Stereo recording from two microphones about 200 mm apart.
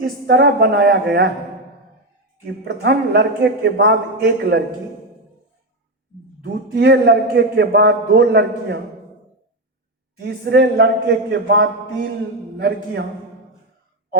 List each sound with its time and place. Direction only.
0.0 s a man's voice: 55° right (ahead or behind)
2.6 s a man's voice: 60° right (ahead or behind)
6.4 s a man's voice: 55° right (ahead or behind)
10.2 s a man's voice: 55° right (ahead or behind)